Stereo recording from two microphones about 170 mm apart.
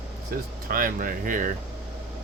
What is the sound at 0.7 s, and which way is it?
Speech, 55° right (ahead or behind).